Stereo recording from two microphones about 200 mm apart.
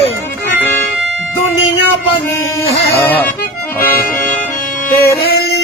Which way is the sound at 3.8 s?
45° left (ahead or behind).